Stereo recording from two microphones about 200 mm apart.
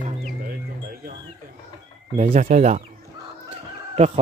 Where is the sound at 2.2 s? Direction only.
40° right (ahead or behind).